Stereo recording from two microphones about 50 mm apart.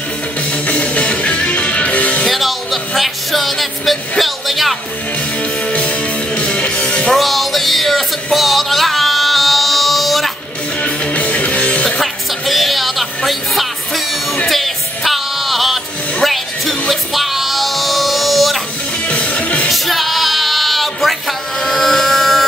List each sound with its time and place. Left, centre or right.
0.5 s music: left
2.2 s music: centre
5.4 s music: left
7.2 s music: centre
10.8 s music: left
12.0 s music: centre
19.0 s music: left
19.7 s music: centre